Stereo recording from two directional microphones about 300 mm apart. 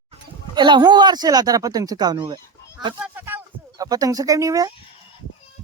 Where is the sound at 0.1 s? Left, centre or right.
Centre.